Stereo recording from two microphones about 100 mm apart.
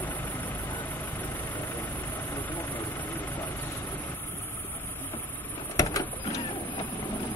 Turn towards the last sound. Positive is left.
turn(degrees=35)  # may be behind; listen again after turning